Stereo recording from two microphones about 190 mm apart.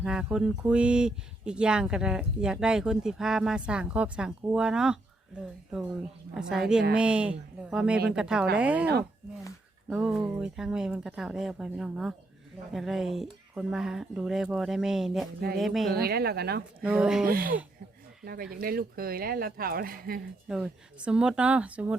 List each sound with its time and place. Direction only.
0.0 s speech: 5° right (ahead or behind)
6.3 s speech: 5° right (ahead or behind)
9.9 s speech: 5° right (ahead or behind)
15.9 s a woman's voice: 55° right (ahead or behind)
16.8 s speech: 5° right (ahead or behind)
17.2 s speech: 50° right (ahead or behind)
18.6 s speech: 50° right (ahead or behind)
20.5 s speech: 5° right (ahead or behind)